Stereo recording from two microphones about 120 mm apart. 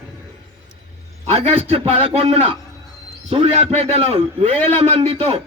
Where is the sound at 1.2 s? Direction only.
60° right (ahead or behind).